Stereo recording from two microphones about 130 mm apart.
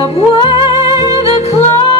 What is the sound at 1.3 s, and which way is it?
Music, 55° left (ahead or behind).